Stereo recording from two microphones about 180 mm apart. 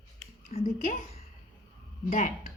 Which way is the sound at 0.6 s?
45° left (ahead or behind).